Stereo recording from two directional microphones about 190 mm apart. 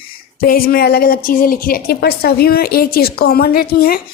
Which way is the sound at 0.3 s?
50° left (ahead or behind).